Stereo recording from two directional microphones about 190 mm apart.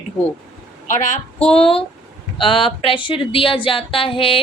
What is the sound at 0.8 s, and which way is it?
Speech, 40° left (ahead or behind).